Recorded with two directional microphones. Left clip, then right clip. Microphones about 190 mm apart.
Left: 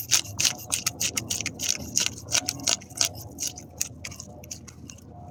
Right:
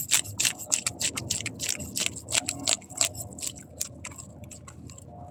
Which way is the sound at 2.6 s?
20° right (ahead or behind).